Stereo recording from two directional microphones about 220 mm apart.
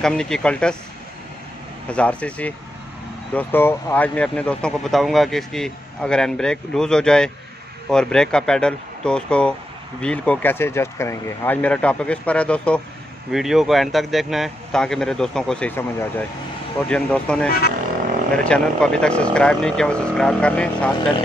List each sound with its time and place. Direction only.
0.0 s speech: 5° left (ahead or behind)
1.9 s speech: 5° left (ahead or behind)
17.5 s speech: 45° left (ahead or behind)
18.4 s speech: 5° left (ahead or behind)